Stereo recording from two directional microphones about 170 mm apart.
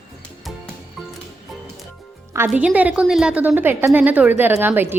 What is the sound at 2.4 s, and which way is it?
A woman's voice, 5° right (ahead or behind).